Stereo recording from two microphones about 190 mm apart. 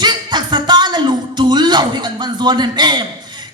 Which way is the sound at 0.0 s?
20° right (ahead or behind).